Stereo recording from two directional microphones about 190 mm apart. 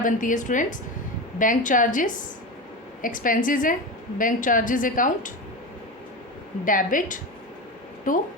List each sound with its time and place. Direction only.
0.0 s a woman's voice: 45° left (ahead or behind)
6.7 s a woman's voice: 45° left (ahead or behind)